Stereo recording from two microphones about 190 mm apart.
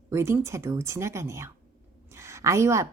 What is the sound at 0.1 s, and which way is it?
A woman's voice, 15° right (ahead or behind).